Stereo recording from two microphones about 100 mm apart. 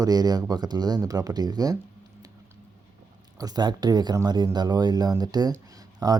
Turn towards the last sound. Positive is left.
turn(degrees=-40)  # may be behind; listen again after turning